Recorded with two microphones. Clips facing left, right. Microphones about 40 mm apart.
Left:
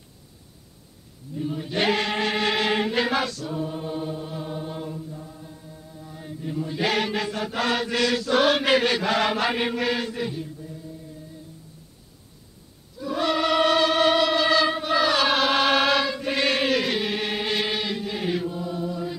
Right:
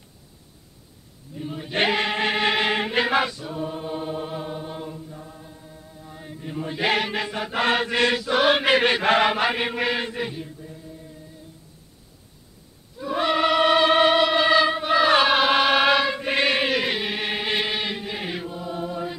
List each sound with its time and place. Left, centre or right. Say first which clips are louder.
1.3 s a sound: left 3 dB; centre
1.9 s chant: even; centre
4.6 s chant: left 1 dB; centre
6.3 s chant: left 1 dB; right
7.6 s mantra: right 3 dB; right
8.2 s chant: right 1 dB; centre
12.9 s choir: right 2 dB; right
15.2 s chant: right 2 dB; centre
16.1 s chant: right 2 dB; right
18.8 s chant: right 3 dB; right